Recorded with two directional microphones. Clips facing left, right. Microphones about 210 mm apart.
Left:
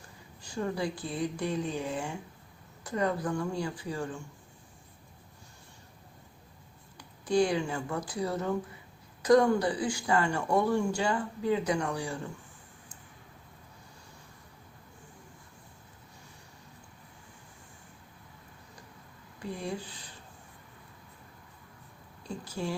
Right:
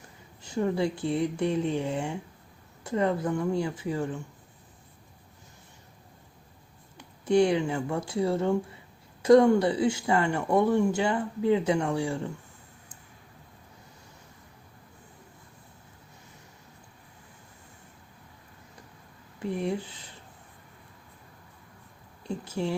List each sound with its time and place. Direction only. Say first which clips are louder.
0.4 s speech: right 5 dB; 25° right (ahead or behind)
6.9 s speech: right 4 dB; 25° right (ahead or behind)
19.4 s speech: right 6 dB; 20° right (ahead or behind)
22.3 s speech: right 5 dB; 20° right (ahead or behind)